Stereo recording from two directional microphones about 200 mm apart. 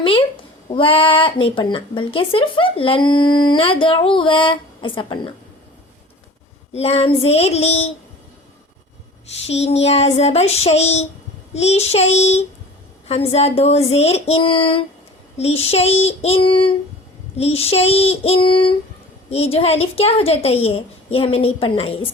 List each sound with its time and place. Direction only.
0.0 s a child's voice: 25° left (ahead or behind)
6.7 s child singing: 30° left (ahead or behind)
9.5 s child singing: 30° left (ahead or behind)
15.4 s speech: 30° left (ahead or behind)